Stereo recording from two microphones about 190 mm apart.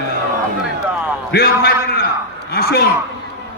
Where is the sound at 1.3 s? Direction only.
55° left (ahead or behind).